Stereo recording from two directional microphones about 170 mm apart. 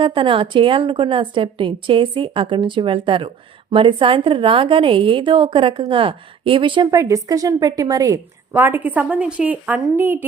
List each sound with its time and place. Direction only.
0.0 s a woman's voice: 30° right (ahead or behind); by 10.2 s 10° right (ahead or behind)